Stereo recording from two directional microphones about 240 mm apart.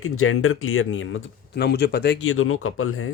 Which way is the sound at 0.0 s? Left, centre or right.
Left.